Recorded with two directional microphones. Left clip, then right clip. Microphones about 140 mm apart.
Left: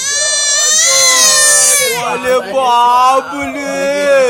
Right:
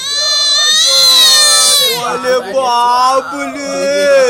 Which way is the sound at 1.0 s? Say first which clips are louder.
Right 5 dB; 45° left (ahead or behind).